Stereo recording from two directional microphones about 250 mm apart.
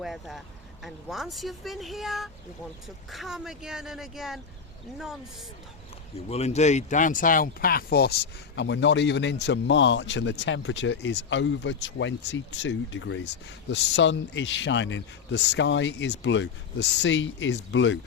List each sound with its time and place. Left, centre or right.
0.0 s speech: centre
6.2 s speech: left